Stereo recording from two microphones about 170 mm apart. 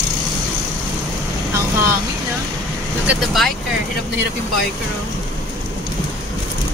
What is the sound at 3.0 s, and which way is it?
Speech, centre (ahead or behind).